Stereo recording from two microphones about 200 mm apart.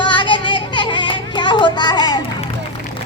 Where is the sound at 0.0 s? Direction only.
25° left (ahead or behind).